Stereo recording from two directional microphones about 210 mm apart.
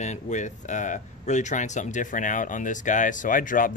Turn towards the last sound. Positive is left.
turn(degrees=40)  # may be behind; listen again after turning